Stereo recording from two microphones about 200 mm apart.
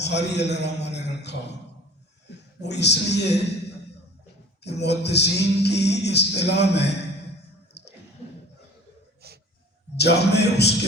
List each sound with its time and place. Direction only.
0.0 s a man's voice: 60° left (ahead or behind)
4.6 s music: 55° left (ahead or behind)
9.2 s wheeze: 50° right (ahead or behind)
10.0 s music: 55° left (ahead or behind)